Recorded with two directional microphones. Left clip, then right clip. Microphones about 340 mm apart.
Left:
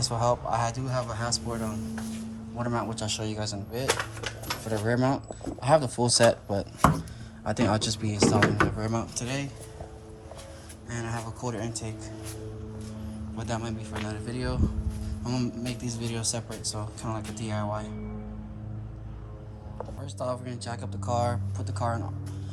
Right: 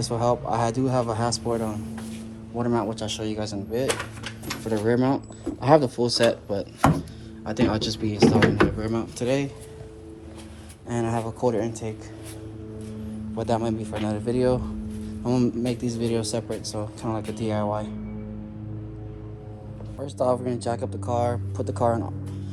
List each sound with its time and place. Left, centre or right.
0.0 s a man's voice: centre
10.8 s a man's voice: centre
13.3 s a man's voice: centre
20.0 s a man's voice: centre